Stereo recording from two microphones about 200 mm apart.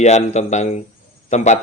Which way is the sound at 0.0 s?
35° left (ahead or behind).